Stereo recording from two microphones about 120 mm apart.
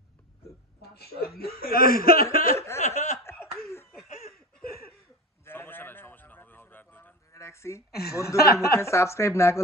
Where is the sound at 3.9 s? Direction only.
Centre (ahead or behind).